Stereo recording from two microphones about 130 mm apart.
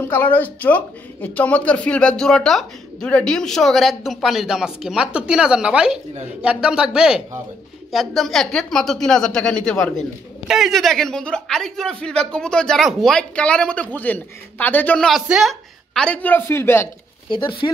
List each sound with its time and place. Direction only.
0.0 s a woman's voice: 15° left (ahead or behind)
15.0 s a woman's voice: 5° right (ahead or behind); by 16.9 s 20° left (ahead or behind)
17.3 s speech: 40° left (ahead or behind)